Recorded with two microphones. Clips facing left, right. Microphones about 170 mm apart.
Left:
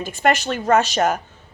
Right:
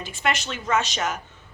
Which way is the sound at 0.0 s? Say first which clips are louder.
Left 7 dB; 45° left (ahead or behind).